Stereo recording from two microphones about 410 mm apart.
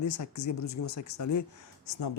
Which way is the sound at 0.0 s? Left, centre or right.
Left.